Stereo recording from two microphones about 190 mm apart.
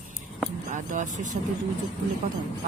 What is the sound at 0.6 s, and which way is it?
Speech, 40° right (ahead or behind).